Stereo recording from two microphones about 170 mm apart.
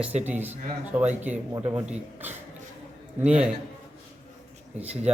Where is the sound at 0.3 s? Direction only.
10° right (ahead or behind).